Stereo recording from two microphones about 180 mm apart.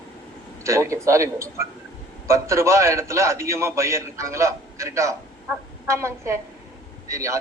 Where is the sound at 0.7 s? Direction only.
15° right (ahead or behind).